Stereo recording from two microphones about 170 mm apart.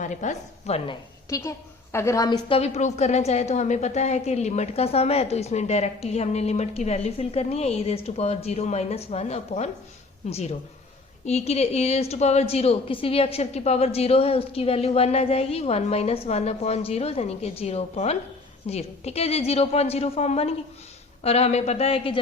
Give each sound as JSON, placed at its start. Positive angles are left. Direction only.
{"t": 0.0, "sound": "a woman's voice", "side_deg": 45}
{"t": 1.3, "sound": "a woman's voice", "side_deg": 15}
{"t": 2.6, "sound": "a woman's voice", "side_deg": 40}